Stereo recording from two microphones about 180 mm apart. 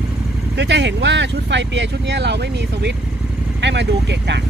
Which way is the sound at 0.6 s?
75° right (ahead or behind).